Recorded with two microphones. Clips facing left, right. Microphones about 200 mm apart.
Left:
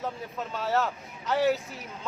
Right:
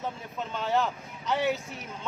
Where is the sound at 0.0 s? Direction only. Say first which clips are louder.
Left 1 dB; centre (ahead or behind).